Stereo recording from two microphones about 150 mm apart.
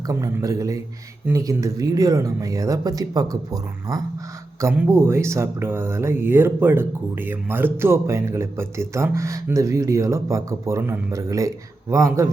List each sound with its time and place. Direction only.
0.1 s speech: 20° right (ahead or behind)